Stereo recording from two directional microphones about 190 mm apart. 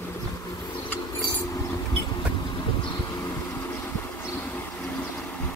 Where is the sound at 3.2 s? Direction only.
15° left (ahead or behind).